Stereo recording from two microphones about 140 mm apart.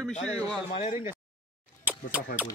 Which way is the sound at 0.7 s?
60° left (ahead or behind).